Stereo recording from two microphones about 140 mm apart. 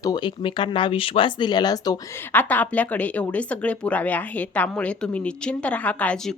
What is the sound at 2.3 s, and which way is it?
Speech, 10° left (ahead or behind).